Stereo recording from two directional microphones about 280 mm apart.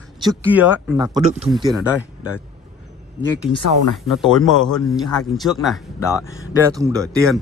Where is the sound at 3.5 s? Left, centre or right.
Left.